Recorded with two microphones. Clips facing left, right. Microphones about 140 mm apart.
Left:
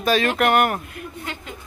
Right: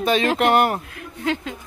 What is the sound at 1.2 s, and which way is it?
Speech, 90° right.